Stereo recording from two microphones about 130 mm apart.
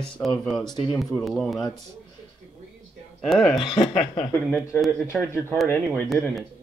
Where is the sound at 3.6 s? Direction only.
40° left (ahead or behind).